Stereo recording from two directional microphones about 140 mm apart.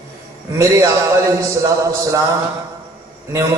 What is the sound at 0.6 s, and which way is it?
Speech, 20° right (ahead or behind).